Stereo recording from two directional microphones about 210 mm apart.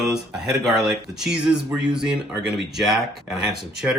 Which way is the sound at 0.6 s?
Centre (ahead or behind).